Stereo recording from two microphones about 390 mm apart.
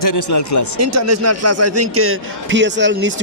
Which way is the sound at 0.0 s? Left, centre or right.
Left.